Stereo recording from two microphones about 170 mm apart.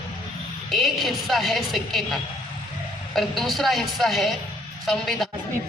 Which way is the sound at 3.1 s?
Centre (ahead or behind).